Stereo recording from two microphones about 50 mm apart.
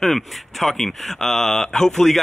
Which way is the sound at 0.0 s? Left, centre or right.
Centre.